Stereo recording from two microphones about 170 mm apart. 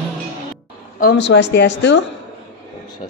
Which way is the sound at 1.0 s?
80° left.